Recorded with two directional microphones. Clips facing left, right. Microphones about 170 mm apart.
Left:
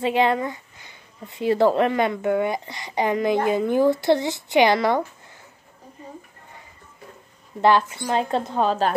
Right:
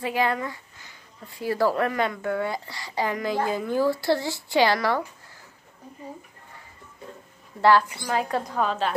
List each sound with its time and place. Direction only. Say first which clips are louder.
0.0 s speech: left 5 dB; 25° left (ahead or behind)
7.6 s speech: left 1 dB; 20° left (ahead or behind)